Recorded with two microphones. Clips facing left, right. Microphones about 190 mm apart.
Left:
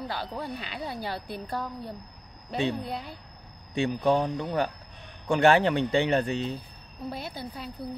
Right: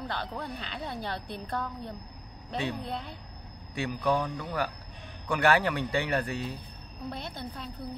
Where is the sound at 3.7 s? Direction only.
25° left (ahead or behind).